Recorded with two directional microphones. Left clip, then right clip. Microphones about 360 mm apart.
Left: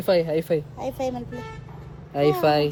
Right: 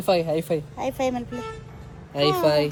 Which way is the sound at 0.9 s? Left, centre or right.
Right.